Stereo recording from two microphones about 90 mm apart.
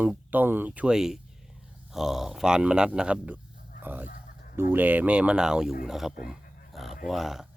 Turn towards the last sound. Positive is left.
turn(degrees=-5)  # may be behind; listen again after turning